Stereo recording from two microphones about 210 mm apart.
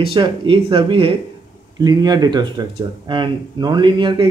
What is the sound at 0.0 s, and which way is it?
Speech, 25° right (ahead or behind).